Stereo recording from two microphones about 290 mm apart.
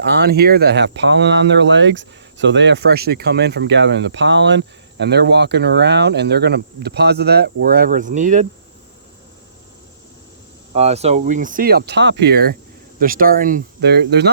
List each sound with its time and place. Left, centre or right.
0.0 s speech: right
10.8 s speech: right